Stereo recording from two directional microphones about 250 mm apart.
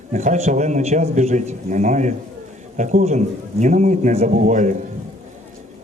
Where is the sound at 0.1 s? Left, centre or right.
Right.